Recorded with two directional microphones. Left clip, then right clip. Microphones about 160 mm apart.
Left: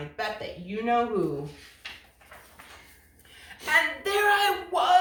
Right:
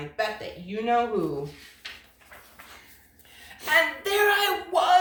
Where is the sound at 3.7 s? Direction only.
15° right (ahead or behind).